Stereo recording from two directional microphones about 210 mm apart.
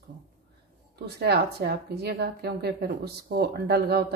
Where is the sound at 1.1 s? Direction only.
50° right (ahead or behind).